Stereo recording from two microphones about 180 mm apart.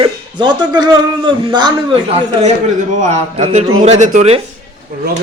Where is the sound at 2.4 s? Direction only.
45° right (ahead or behind).